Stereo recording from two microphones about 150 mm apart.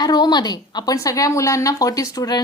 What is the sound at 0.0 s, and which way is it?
A woman's voice, 25° left (ahead or behind).